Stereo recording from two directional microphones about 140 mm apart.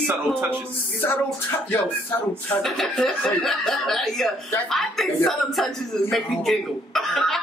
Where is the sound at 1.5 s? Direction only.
15° left (ahead or behind).